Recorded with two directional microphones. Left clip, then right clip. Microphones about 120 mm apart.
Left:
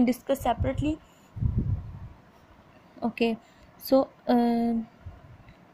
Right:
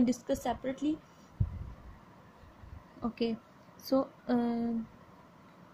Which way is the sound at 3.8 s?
30° left (ahead or behind).